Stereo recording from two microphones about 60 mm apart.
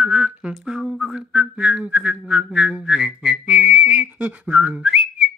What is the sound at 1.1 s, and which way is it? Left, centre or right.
Whistling, centre.